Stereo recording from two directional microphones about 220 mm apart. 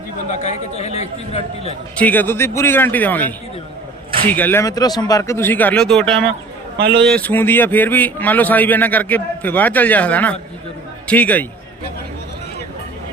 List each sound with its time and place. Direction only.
0.3 s a man's voice: 30° left (ahead or behind)
2.0 s a man's voice: 10° left (ahead or behind)